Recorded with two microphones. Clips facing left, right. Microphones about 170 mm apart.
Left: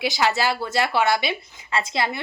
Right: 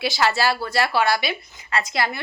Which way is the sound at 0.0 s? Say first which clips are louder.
Right 1 dB; 15° left (ahead or behind).